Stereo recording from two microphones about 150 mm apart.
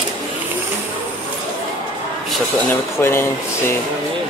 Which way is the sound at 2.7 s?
15° left (ahead or behind).